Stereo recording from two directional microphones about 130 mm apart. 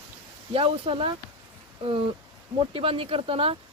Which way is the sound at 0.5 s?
45° right (ahead or behind).